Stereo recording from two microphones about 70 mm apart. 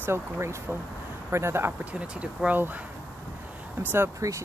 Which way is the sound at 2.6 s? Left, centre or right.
Right.